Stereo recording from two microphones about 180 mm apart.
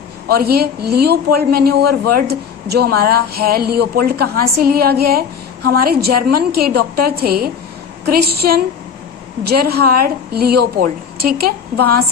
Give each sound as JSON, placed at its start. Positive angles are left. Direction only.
{"t": 0.3, "sound": "a woman's voice", "side_deg": -60}